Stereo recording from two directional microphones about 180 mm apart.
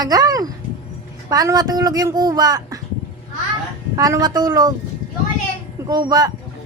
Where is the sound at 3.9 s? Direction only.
20° right (ahead or behind).